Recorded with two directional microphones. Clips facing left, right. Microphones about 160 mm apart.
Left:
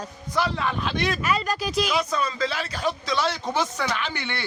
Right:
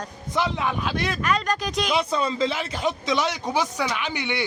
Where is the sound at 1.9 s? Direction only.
25° right (ahead or behind).